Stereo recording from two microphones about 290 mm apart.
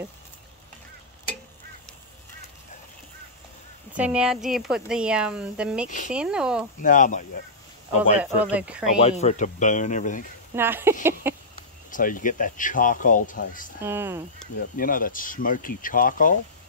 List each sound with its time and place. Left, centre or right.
3.9 s speech: centre
5.9 s speech: left
6.1 s speech: centre
6.8 s speech: left
8.2 s speech: centre
9.0 s speech: left
10.5 s speech: centre
11.9 s speech: left
13.8 s speech: centre
14.6 s speech: left